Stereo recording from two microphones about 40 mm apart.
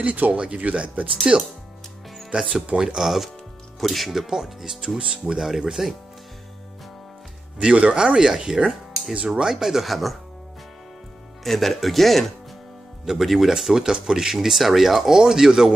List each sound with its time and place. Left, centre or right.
0.0 s speech: right
0.3 s speech: right
0.6 s speech: right
1.3 s speech: centre
3.0 s speech: centre
4.8 s speech: right
5.2 s speech: centre
7.6 s speech: right
8.6 s music: centre
9.1 s speech: right
9.4 s speech: centre
11.4 s speech: centre